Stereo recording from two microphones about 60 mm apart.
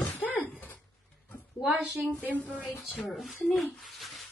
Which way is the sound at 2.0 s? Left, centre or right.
Left.